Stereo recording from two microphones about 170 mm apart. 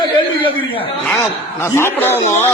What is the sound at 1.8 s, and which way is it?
Speech, 10° left (ahead or behind).